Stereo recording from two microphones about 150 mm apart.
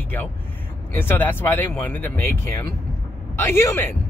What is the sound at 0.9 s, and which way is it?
Speech, 15° left (ahead or behind).